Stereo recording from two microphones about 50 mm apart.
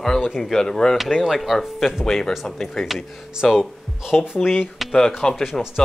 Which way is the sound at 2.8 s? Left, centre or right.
Centre.